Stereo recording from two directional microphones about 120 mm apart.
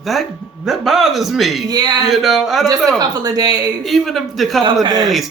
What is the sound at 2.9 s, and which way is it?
Speech, 30° right (ahead or behind).